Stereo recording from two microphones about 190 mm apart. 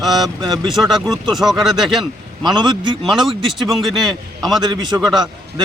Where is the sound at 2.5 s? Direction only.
25° right (ahead or behind).